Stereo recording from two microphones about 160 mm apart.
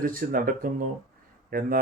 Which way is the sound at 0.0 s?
60° right (ahead or behind).